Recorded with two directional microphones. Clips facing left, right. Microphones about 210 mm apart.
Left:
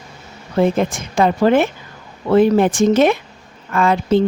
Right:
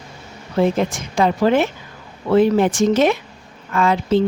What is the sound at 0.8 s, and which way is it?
Speech, 50° left (ahead or behind).